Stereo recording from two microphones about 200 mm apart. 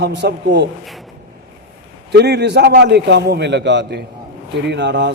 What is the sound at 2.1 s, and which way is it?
A man's voice, 55° right (ahead or behind).